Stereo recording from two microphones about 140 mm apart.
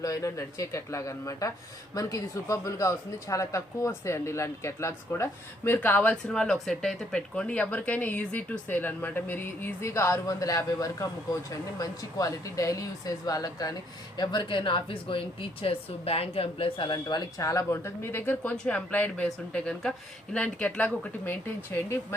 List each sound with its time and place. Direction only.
0.0 s speech: 25° left (ahead or behind)